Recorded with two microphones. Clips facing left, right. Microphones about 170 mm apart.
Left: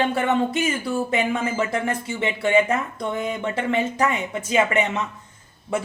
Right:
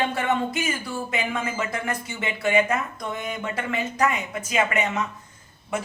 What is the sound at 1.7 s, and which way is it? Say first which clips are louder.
Speech: left 4 dB; 30° left (ahead or behind).